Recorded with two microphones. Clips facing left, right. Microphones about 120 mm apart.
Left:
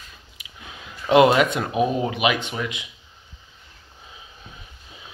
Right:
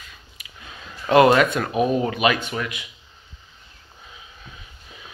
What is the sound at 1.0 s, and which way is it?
Speech, 15° left (ahead or behind).